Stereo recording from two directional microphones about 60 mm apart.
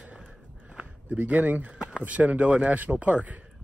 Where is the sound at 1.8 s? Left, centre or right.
Centre.